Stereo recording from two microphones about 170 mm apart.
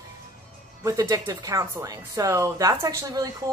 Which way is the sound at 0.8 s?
20° right (ahead or behind).